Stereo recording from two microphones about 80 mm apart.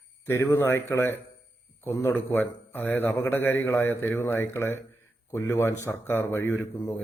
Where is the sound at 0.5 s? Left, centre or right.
Left.